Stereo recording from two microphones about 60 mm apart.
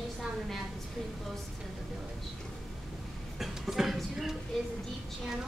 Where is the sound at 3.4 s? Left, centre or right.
Centre.